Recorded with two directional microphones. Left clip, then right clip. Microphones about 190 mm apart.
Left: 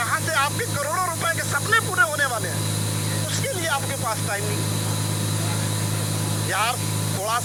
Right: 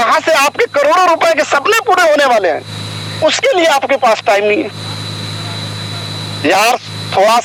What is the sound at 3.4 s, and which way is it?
Speech, 55° right (ahead or behind).